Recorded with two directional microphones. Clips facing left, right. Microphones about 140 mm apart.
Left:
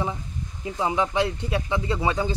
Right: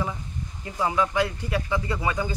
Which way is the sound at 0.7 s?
20° left (ahead or behind).